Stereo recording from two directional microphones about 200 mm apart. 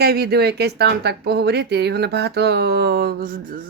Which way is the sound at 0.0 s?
50° right (ahead or behind).